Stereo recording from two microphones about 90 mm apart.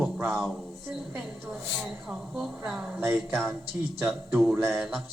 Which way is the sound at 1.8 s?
5° right (ahead or behind).